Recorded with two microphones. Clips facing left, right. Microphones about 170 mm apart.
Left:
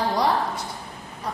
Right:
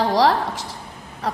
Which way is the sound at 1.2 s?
90° right.